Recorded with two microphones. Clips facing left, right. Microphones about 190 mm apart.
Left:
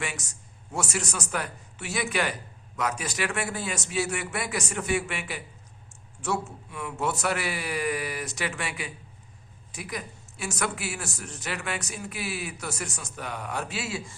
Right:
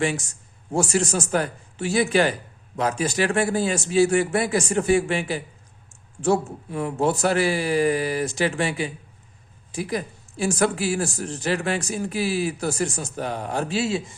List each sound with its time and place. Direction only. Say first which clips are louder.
0.0 s speech: right 11 dB; 30° right (ahead or behind)